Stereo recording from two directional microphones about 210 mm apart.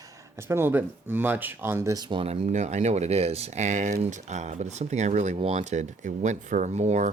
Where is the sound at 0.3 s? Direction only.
10° right (ahead or behind).